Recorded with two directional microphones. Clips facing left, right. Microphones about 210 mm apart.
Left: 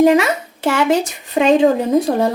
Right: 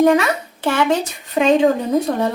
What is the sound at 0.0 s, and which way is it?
A child's voice, 25° left (ahead or behind).